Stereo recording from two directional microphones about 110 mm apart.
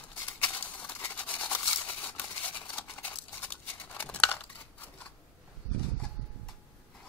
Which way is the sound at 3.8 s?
15° left (ahead or behind).